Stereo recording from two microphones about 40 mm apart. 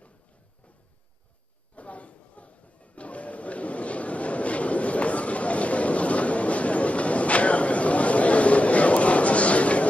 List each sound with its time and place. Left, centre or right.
1.8 s chatter: left